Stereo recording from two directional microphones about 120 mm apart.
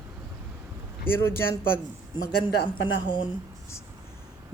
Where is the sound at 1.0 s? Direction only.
20° left (ahead or behind).